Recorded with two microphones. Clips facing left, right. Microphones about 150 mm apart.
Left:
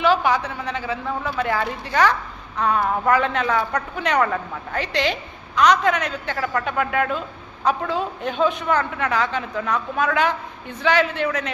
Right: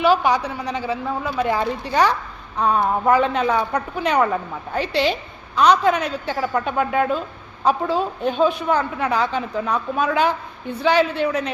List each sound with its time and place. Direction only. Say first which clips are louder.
0.0 s a woman's voice: right 2 dB; 15° right (ahead or behind)